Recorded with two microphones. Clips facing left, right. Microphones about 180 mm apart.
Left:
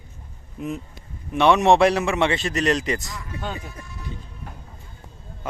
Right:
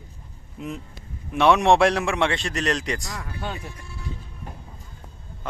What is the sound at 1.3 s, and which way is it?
A man's voice, centre (ahead or behind).